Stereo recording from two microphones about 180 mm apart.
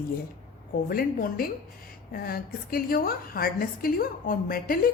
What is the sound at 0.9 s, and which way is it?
A woman's voice, 55° left (ahead or behind).